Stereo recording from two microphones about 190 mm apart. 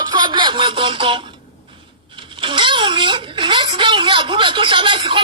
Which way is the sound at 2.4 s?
25° right (ahead or behind).